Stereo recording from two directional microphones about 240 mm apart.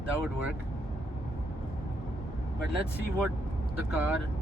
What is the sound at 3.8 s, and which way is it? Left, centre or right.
Speech, centre.